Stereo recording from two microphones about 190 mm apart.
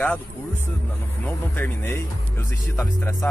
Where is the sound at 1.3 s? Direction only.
10° left (ahead or behind).